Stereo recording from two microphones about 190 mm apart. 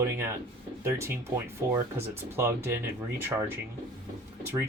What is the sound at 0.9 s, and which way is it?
Speech, 15° right (ahead or behind).